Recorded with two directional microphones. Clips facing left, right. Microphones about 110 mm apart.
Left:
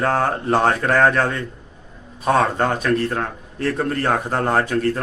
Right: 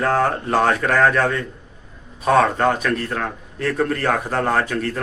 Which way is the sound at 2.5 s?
30° left (ahead or behind).